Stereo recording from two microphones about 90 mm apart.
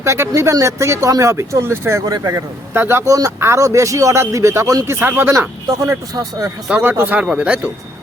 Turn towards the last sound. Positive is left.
turn(degrees=-15)  # may be behind; listen again after turning